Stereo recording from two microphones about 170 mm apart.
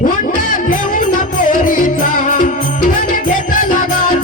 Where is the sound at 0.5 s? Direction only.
55° left (ahead or behind).